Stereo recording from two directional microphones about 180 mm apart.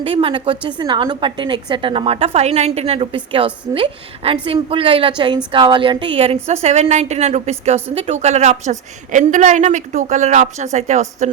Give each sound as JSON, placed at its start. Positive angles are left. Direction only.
{"t": 0.0, "sound": "a woman's voice", "side_deg": -30}